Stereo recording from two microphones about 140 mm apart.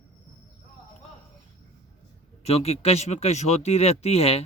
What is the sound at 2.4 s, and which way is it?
Speech, 45° left (ahead or behind).